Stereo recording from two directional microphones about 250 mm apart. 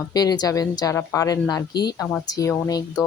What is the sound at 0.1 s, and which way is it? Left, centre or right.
Speech, centre.